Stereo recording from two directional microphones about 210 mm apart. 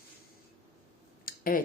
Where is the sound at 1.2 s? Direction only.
45° left (ahead or behind).